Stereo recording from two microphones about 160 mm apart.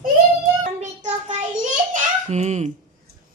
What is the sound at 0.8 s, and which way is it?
Child singing, 45° right (ahead or behind).